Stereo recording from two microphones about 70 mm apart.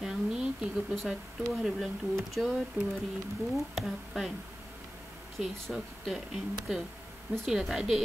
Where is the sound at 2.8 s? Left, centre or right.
Right.